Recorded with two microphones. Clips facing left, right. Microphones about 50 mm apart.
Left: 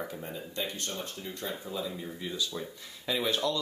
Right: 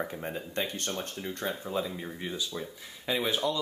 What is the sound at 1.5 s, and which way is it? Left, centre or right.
Speech, right.